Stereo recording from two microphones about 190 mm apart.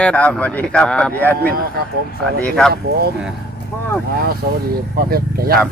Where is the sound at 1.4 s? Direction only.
55° right (ahead or behind).